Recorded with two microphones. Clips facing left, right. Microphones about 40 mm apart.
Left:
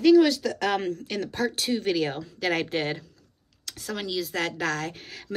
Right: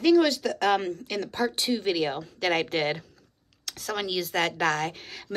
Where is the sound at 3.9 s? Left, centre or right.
Right.